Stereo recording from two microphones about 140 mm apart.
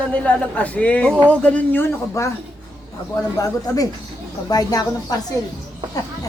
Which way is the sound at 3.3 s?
25° left (ahead or behind).